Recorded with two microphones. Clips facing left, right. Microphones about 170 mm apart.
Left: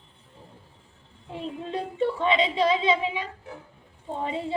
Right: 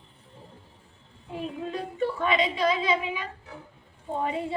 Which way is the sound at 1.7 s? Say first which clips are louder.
Left 4 dB; 25° left (ahead or behind).